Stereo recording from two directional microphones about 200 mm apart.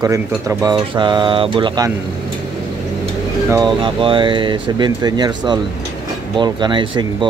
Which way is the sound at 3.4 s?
20° right (ahead or behind).